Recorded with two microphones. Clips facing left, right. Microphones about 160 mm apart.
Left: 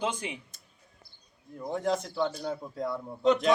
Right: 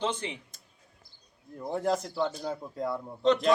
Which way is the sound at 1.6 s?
5° right (ahead or behind).